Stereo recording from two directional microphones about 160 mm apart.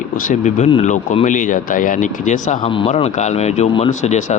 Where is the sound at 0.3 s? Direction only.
45° left (ahead or behind).